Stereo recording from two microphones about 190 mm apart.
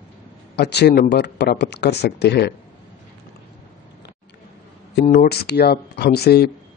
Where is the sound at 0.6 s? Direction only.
60° left (ahead or behind).